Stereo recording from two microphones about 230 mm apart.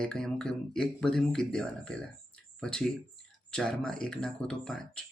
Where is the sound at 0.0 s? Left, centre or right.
Centre.